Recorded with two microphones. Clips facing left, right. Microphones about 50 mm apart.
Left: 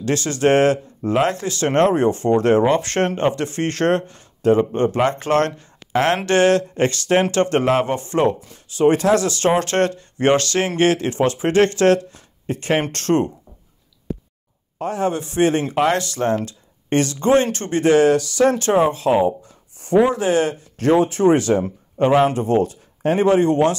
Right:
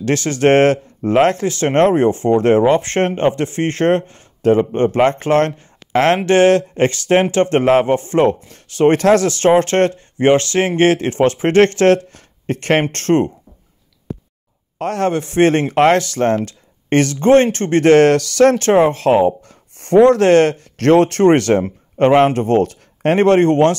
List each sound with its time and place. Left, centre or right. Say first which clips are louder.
0.0 s speech: right 4 dB; right
12.9 s speech: right 3 dB; right
14.8 s speech: right 3 dB; right
15.0 s speech: right 5 dB; right
18.7 s speech: right 4 dB; right